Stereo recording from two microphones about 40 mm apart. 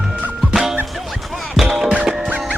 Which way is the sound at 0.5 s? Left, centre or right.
Centre.